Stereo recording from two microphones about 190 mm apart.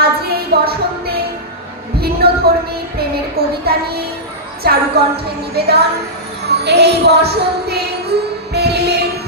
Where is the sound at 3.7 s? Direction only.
55° right (ahead or behind).